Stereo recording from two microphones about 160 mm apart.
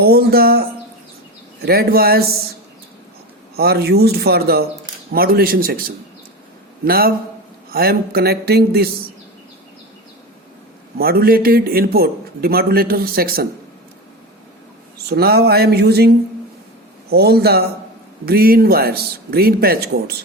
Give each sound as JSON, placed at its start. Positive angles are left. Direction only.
{"t": 0.0, "sound": "speech", "side_deg": -75}
{"t": 1.6, "sound": "a man's voice", "side_deg": -70}
{"t": 3.5, "sound": "a man's voice", "side_deg": -80}
{"t": 6.8, "sound": "a man's voice", "side_deg": -70}
{"t": 10.9, "sound": "a man's voice", "side_deg": -70}
{"t": 14.9, "sound": "speech", "side_deg": -80}
{"t": 18.3, "sound": "a man's voice", "side_deg": -70}